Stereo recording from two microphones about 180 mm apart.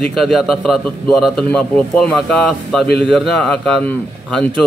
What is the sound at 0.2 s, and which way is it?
A man's voice, centre (ahead or behind).